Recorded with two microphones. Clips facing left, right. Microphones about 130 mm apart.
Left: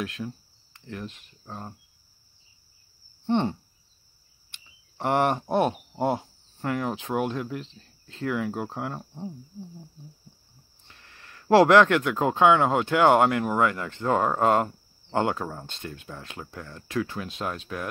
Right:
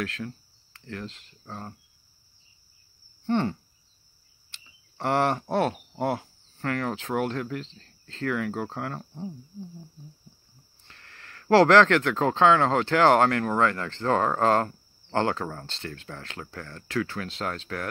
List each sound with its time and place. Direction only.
0.0 s speech: 15° left (ahead or behind)
3.3 s cricket: 20° left (ahead or behind)
4.5 s a sound: 20° left (ahead or behind)
5.9 s speech: 20° left (ahead or behind)
10.9 s speech: 15° left (ahead or behind)